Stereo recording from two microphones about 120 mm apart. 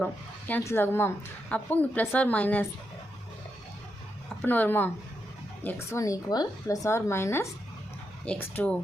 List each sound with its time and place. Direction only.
0.0 s a woman's voice: 15° left (ahead or behind)
4.4 s a woman's voice: 15° left (ahead or behind)
5.6 s a woman's voice: 25° left (ahead or behind)